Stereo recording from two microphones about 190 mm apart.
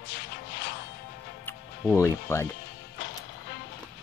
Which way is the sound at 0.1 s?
60° left (ahead or behind).